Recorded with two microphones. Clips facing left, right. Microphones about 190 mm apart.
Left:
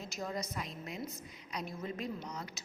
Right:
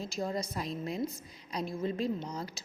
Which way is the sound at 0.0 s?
30° right (ahead or behind).